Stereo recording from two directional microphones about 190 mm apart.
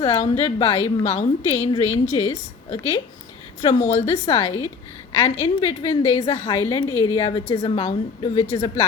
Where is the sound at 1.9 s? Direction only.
35° left (ahead or behind).